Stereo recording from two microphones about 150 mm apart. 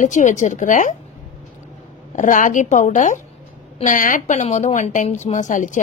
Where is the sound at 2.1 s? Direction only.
60° left (ahead or behind).